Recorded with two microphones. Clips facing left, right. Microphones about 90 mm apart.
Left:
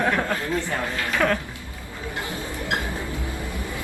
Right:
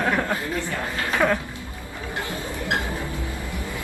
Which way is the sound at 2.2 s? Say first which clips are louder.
Right 2 dB; 20° left (ahead or behind).